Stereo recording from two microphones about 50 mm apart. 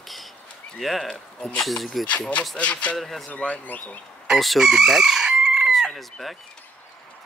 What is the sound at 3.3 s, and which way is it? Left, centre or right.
Speech, left.